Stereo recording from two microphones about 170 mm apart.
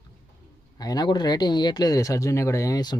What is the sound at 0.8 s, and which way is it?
Speech, 20° left (ahead or behind).